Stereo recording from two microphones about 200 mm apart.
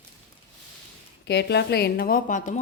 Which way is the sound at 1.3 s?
55° left (ahead or behind).